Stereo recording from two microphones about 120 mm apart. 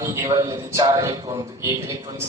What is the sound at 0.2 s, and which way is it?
A man's voice, 25° right (ahead or behind).